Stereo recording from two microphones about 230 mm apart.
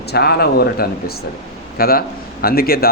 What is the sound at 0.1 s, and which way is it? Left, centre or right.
A man's voice, left.